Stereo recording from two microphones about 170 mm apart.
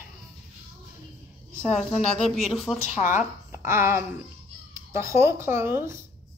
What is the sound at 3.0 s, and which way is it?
Speech, 15° right (ahead or behind).